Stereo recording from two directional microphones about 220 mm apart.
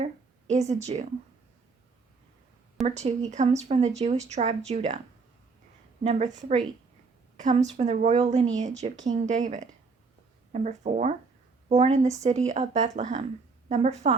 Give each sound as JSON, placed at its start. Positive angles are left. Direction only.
{"t": 0.0, "sound": "a woman's voice", "side_deg": -30}
{"t": 2.8, "sound": "speech", "side_deg": -30}
{"t": 6.0, "sound": "speech", "side_deg": -30}